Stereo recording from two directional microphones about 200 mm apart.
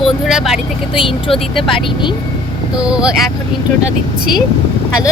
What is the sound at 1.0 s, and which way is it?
Speech, 25° left (ahead or behind).